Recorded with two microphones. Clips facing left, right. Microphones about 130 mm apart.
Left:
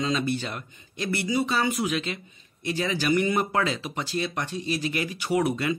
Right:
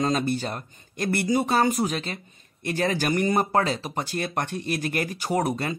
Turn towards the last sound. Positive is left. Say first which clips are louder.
# left 1 dB
turn(degrees=-40)  # may be behind; listen again after turning